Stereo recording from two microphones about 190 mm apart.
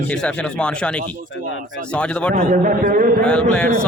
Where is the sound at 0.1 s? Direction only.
5° left (ahead or behind).